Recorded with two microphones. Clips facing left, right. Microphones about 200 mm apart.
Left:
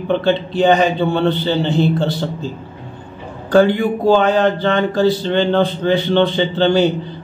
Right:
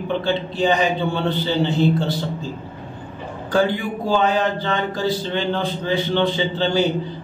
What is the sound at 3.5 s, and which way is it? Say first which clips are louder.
A man's voice: left 7 dB; 65° left (ahead or behind).